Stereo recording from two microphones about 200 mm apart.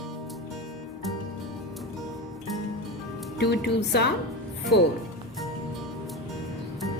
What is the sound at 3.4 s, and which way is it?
Speech, 55° left (ahead or behind).